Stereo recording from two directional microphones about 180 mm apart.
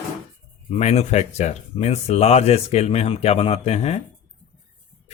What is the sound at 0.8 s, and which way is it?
Speech, 40° left (ahead or behind).